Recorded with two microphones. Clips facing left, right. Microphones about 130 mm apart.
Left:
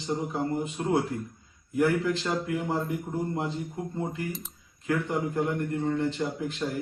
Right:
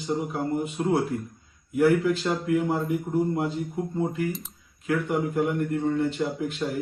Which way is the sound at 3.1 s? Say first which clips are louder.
Right 7 dB; centre (ahead or behind).